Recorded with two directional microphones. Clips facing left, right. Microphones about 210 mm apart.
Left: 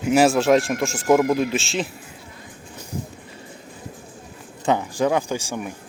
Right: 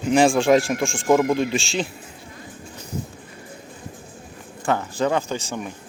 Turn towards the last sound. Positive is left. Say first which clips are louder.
# left 1 dB
turn(degrees=10)  # may be behind; listen again after turning